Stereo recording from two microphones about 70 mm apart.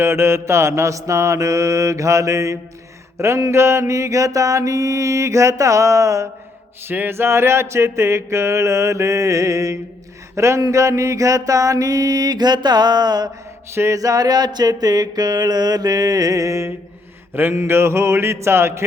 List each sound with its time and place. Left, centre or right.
0.0 s a sound: right
6.8 s a sound: right
10.3 s speech: right
10.6 s mantra: right
13.7 s a man's voice: right
14.0 s mantra: right
17.3 s a man's voice: right